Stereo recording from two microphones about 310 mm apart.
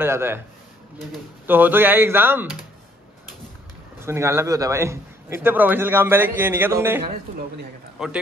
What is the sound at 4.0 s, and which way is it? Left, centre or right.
A man's voice, centre.